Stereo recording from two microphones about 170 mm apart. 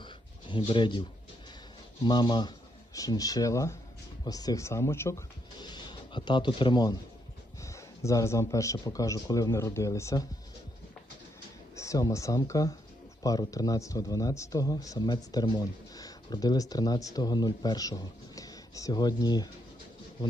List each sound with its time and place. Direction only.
0.0 s a sound: 30° left (ahead or behind)
2.0 s speech: 25° left (ahead or behind)
11.8 s speech: 20° left (ahead or behind)